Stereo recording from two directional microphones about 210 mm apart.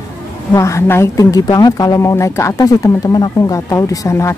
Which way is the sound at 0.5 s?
15° left (ahead or behind).